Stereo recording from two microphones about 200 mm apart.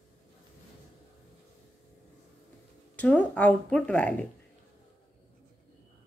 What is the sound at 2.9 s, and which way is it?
Speech, 5° left (ahead or behind).